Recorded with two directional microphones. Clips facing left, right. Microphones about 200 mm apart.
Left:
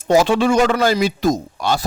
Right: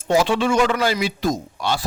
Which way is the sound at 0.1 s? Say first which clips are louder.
Left 4 dB; 40° left (ahead or behind).